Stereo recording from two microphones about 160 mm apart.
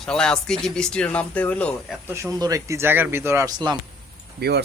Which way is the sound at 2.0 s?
20° right (ahead or behind).